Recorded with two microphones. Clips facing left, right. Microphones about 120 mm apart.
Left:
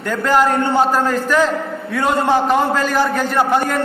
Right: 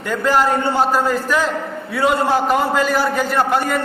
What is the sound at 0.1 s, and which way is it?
A man's voice, 5° right (ahead or behind).